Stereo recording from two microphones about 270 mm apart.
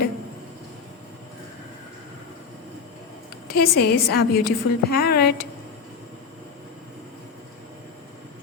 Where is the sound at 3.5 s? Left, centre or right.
Left.